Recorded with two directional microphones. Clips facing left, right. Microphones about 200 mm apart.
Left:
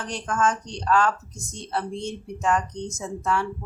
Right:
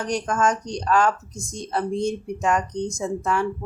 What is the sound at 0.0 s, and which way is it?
Speech, 15° right (ahead or behind).